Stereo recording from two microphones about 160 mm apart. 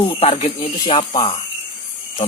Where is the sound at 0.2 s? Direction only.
45° left (ahead or behind).